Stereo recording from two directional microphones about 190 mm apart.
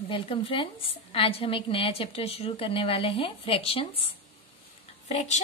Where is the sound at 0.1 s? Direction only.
30° left (ahead or behind).